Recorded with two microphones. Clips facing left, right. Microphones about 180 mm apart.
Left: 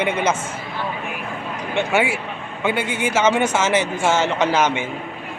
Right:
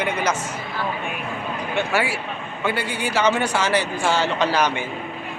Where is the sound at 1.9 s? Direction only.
20° left (ahead or behind).